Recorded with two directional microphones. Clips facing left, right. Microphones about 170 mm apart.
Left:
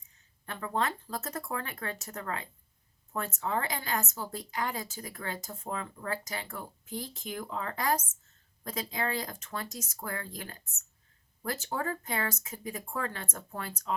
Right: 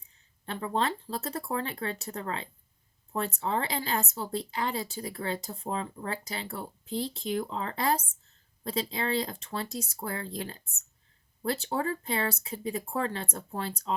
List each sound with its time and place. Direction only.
0.4 s a woman's voice: 30° right (ahead or behind)